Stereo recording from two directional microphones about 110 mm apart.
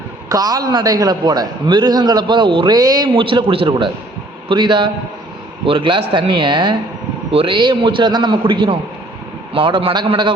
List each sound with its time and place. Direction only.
0.3 s a man's voice: 35° right (ahead or behind)
2.7 s a man's voice: 35° right (ahead or behind)